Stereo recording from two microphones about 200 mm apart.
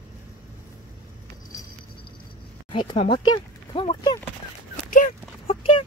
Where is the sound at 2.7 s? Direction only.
25° left (ahead or behind).